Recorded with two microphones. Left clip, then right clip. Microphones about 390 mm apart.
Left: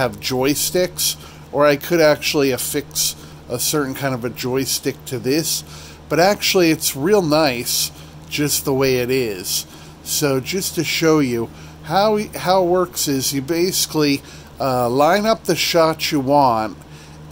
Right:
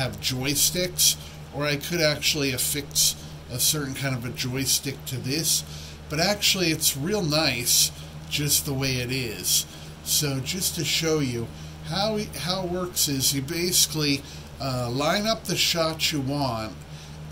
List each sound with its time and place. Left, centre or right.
0.0 s a man's voice: centre